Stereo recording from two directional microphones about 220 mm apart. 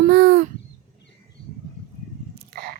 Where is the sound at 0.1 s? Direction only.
50° right (ahead or behind).